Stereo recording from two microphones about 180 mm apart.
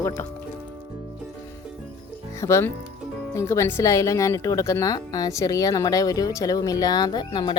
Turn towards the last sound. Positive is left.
turn(degrees=25)  # may be behind; listen again after turning